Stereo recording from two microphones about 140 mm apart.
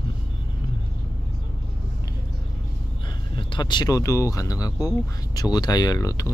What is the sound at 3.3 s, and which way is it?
Speech, 35° left (ahead or behind).